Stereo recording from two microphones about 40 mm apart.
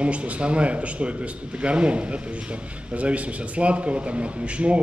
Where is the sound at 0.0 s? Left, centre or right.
Right.